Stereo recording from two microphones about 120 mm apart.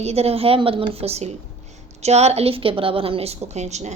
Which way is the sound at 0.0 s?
60° right (ahead or behind).